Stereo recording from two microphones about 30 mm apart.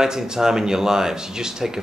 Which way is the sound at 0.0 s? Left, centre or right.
Centre.